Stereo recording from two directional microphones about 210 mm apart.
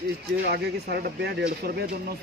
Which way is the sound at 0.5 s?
50° right (ahead or behind).